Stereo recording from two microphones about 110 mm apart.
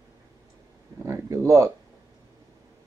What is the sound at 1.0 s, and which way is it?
Speech, 25° right (ahead or behind).